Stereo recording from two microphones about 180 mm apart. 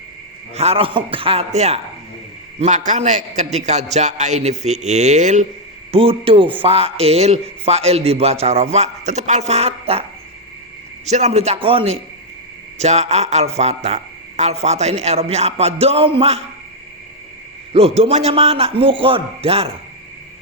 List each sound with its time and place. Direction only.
0.5 s a man's voice: 35° right (ahead or behind)
5.9 s a man's voice: 30° right (ahead or behind)
11.0 s a man's voice: 40° right (ahead or behind)
17.7 s a man's voice: 35° right (ahead or behind)